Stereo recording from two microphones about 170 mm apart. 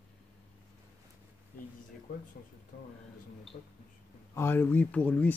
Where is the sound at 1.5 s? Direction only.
55° left (ahead or behind).